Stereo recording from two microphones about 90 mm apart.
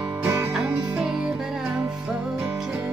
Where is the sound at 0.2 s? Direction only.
25° right (ahead or behind).